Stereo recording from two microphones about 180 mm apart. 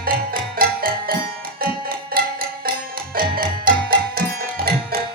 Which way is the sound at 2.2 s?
55° right (ahead or behind).